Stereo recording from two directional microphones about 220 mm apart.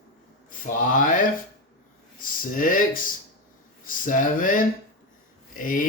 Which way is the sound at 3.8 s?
35° left (ahead or behind).